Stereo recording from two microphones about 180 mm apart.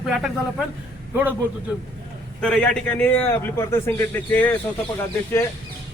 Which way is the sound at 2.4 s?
5° left (ahead or behind).